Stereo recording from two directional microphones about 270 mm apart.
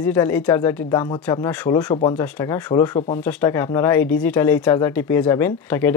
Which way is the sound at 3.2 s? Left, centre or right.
Centre.